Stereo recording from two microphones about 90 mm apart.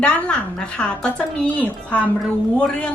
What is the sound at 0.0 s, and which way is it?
A woman's voice, 10° left (ahead or behind).